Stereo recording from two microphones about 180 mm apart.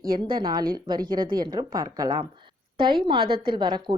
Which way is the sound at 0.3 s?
25° right (ahead or behind).